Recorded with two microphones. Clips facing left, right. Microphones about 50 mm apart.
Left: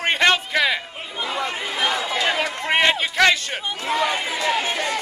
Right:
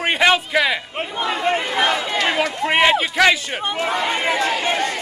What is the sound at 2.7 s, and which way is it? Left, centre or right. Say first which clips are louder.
Speech: right 2 dB; centre.